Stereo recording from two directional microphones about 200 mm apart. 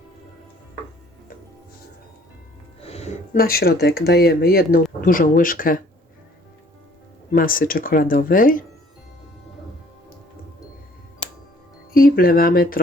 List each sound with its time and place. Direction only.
2.8 s music: 30° left (ahead or behind)
3.3 s speech: 50° left (ahead or behind)
7.3 s speech: 45° left (ahead or behind)
11.9 s speech: 45° left (ahead or behind)